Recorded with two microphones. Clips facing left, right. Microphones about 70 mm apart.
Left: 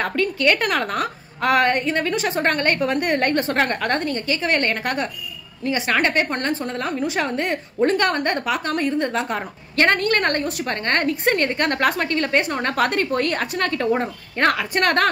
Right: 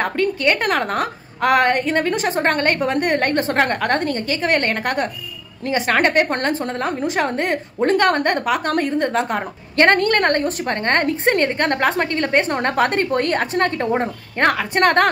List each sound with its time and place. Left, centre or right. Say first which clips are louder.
0.0 s a woman's voice: right 1 dB; right